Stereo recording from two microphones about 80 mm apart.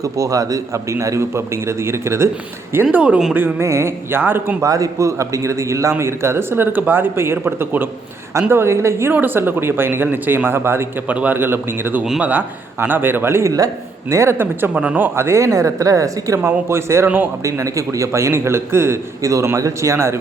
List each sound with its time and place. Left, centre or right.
0.0 s speech: right
2.9 s speech: centre
3.3 s speech: right
4.6 s speech: right
14.7 s speech: centre; by 16.4 s right
16.4 s speech: right